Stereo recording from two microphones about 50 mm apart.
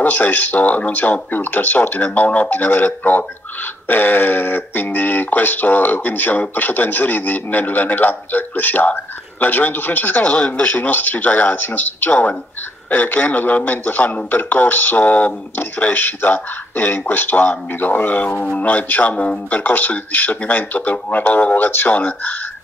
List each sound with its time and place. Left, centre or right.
0.0 s speech: left
10.2 s speech: left